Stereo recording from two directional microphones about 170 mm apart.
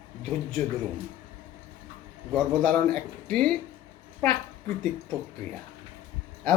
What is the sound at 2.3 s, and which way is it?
Speech, 5° left (ahead or behind).